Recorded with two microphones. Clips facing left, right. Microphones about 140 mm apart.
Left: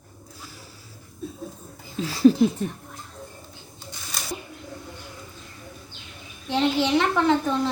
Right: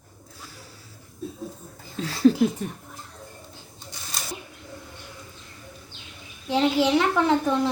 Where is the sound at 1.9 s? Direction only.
10° left (ahead or behind).